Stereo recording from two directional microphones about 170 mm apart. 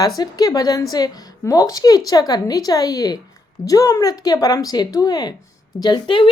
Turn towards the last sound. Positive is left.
turn(degrees=30)  # may be behind; listen again after turning